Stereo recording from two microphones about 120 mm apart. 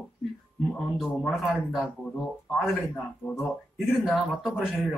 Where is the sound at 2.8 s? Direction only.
15° left (ahead or behind).